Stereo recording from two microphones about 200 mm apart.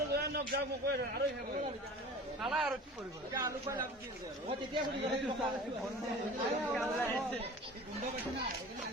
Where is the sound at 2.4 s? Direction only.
Centre (ahead or behind).